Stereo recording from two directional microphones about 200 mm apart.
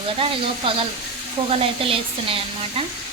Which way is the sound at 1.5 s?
30° right (ahead or behind).